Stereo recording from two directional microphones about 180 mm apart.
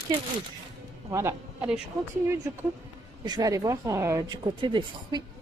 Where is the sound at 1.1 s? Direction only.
15° right (ahead or behind).